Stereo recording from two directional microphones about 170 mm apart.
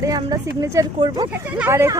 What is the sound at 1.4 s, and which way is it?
Speech, 10° right (ahead or behind).